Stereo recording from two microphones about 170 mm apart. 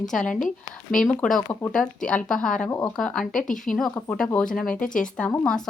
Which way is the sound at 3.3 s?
50° left (ahead or behind).